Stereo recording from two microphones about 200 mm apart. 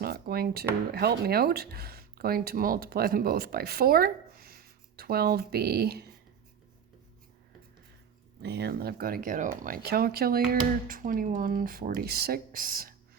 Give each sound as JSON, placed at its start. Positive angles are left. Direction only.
{"t": 0.0, "sound": "a sound", "side_deg": -50}
{"t": 0.9, "sound": "speech", "side_deg": -55}
{"t": 8.4, "sound": "speech", "side_deg": -55}